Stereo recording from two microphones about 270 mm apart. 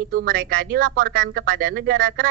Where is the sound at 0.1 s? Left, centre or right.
Right.